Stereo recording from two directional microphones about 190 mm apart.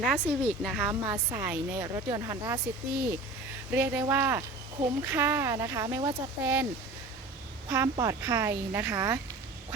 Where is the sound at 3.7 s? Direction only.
15° right (ahead or behind).